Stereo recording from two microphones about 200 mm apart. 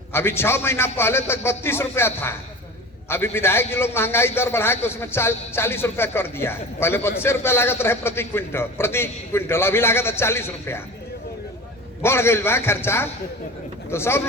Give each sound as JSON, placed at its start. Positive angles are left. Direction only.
{"t": 0.1, "sound": "a man's voice", "side_deg": 10}
{"t": 12.0, "sound": "a man's voice", "side_deg": 10}